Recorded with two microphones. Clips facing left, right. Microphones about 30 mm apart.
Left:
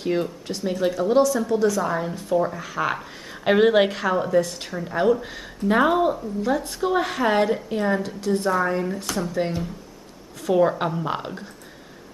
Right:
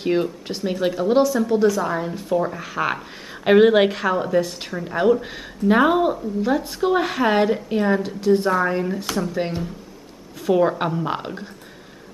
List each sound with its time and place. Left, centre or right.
0.0 s a woman's voice: centre